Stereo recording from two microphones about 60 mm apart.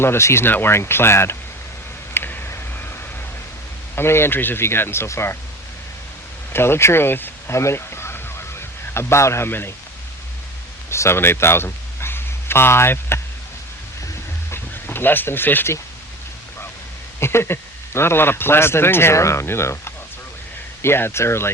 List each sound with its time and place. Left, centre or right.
0.0 s speech: left
2.1 s a sound: left
3.9 s speech: left
6.5 s speech: left
7.5 s a sound: left
9.5 s speech: left
10.8 s speech: left
14.5 s a sound: left
17.2 s speech: left